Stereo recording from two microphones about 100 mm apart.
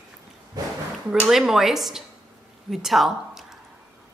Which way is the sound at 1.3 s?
5° right (ahead or behind).